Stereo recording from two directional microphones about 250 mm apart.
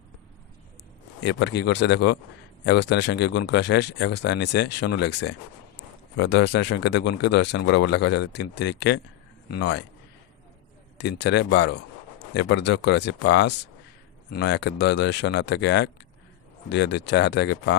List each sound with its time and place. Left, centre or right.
1.2 s a man's voice: left
10.9 s speech: left